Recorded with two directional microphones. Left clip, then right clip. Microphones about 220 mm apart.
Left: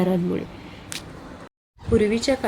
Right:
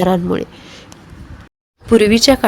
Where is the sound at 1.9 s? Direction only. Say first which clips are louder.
Right 10 dB; 45° right (ahead or behind).